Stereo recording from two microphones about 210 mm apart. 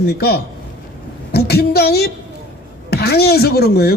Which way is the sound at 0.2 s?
50° left (ahead or behind).